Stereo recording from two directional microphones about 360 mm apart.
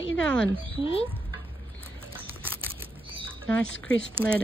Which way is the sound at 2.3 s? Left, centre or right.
Centre.